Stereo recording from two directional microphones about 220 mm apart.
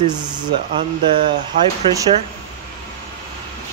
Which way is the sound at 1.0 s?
20° right (ahead or behind).